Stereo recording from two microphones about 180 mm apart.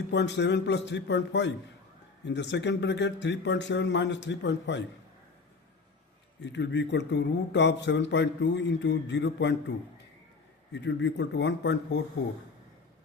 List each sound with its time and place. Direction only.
0.1 s a man's voice: 75° left (ahead or behind)
6.4 s a man's voice: 75° left (ahead or behind)